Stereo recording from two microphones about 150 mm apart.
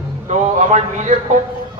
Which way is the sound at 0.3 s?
50° right (ahead or behind).